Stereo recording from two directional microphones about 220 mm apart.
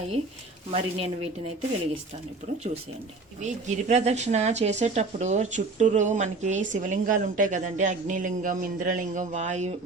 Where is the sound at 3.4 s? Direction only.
30° right (ahead or behind).